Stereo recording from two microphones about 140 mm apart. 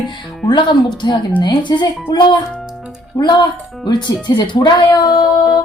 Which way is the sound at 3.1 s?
30° left (ahead or behind).